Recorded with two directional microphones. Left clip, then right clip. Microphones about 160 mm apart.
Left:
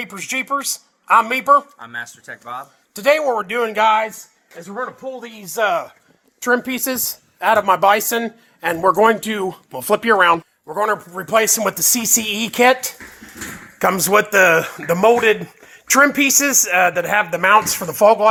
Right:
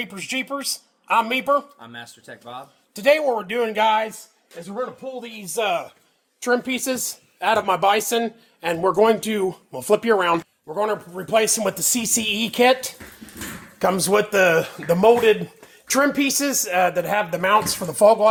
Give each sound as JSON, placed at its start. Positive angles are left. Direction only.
{"t": 0.0, "sound": "a man's voice", "side_deg": 10}
{"t": 1.8, "sound": "speech", "side_deg": -15}
{"t": 2.9, "sound": "a man's voice", "side_deg": 5}
{"t": 6.4, "sound": "speech", "side_deg": 30}
{"t": 9.0, "sound": "a man's voice", "side_deg": 10}